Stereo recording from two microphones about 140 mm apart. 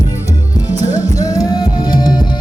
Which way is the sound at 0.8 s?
25° left (ahead or behind).